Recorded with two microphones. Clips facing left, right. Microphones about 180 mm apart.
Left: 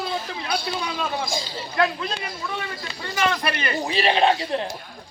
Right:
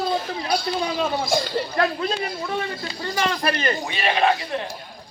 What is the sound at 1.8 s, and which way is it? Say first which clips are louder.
Speech: left 1 dB; 40° right (ahead or behind).